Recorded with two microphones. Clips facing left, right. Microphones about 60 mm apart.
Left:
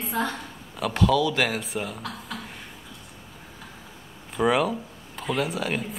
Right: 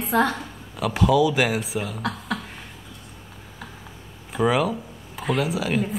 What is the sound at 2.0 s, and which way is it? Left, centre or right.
Speech, right.